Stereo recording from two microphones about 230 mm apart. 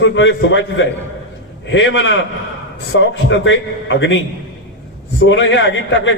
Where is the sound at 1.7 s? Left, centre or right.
Left.